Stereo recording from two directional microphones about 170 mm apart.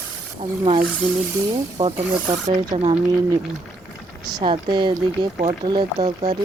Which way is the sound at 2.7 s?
35° right (ahead or behind).